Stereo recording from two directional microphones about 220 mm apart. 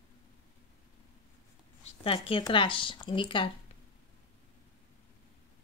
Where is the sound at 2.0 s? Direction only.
25° left (ahead or behind).